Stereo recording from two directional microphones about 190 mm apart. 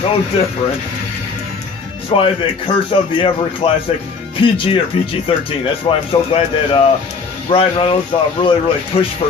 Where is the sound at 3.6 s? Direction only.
25° left (ahead or behind).